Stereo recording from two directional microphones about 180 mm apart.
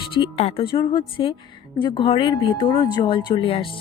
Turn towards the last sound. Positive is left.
turn(degrees=30)  # may be behind; listen again after turning